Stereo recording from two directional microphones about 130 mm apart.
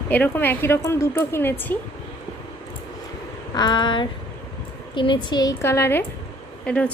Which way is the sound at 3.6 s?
35° left (ahead or behind).